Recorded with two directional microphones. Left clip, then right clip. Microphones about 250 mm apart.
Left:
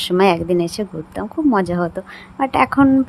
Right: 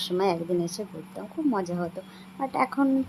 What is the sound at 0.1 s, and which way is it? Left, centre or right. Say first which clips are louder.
Speech: left 11 dB; left.